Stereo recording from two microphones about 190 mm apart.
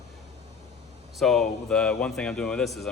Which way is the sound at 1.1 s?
Centre (ahead or behind).